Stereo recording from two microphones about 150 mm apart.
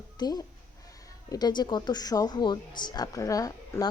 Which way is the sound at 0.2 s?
25° left (ahead or behind).